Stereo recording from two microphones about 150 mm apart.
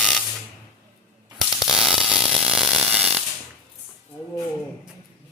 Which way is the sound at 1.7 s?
Centre (ahead or behind).